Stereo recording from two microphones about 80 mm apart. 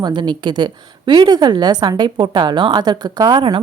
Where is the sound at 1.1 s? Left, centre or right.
Right.